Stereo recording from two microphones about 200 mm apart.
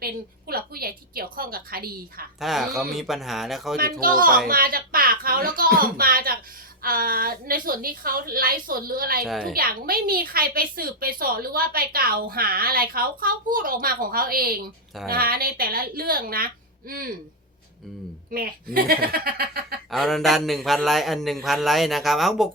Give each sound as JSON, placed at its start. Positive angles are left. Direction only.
{"t": 0.0, "sound": "a woman's voice", "side_deg": -50}
{"t": 2.4, "sound": "a man's voice", "side_deg": 0}
{"t": 4.0, "sound": "a woman's voice", "side_deg": -45}
{"t": 9.2, "sound": "a man's voice", "side_deg": 0}
{"t": 9.5, "sound": "a woman's voice", "side_deg": -50}
{"t": 18.3, "sound": "a woman's voice", "side_deg": -45}
{"t": 19.9, "sound": "a man's voice", "side_deg": 0}